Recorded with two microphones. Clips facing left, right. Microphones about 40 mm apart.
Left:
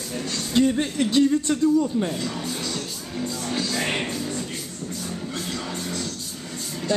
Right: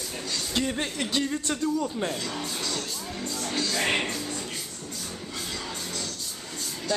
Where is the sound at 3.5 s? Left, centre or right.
Centre.